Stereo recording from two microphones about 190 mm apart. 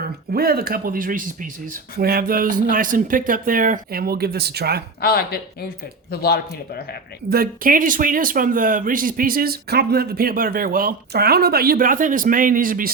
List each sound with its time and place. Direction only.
0.3 s speech: 55° right (ahead or behind)
4.9 s speech: 55° left (ahead or behind)
7.3 s speech: 55° right (ahead or behind)